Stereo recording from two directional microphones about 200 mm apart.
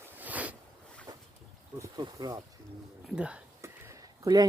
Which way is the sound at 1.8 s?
20° right (ahead or behind).